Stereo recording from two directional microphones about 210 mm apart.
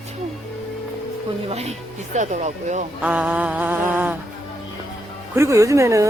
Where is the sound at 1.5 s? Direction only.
30° right (ahead or behind).